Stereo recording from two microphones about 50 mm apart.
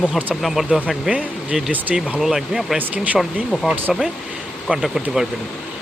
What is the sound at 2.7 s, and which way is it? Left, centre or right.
Speech, right.